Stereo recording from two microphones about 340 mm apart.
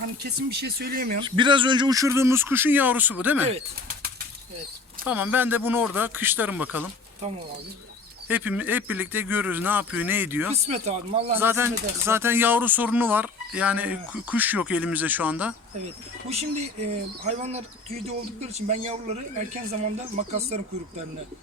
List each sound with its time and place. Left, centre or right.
0.2 s speech: right
1.2 s speech: centre
5.0 s speech: centre
8.3 s speech: centre
10.5 s speech: centre
11.3 s speech: centre
16.3 s speech: centre